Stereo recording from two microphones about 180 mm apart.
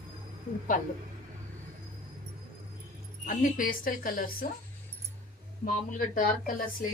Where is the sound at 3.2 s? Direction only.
50° left (ahead or behind).